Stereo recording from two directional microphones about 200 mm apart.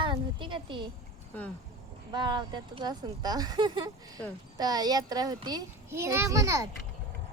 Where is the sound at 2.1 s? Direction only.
20° right (ahead or behind).